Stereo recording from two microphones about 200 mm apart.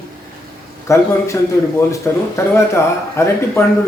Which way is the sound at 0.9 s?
15° left (ahead or behind).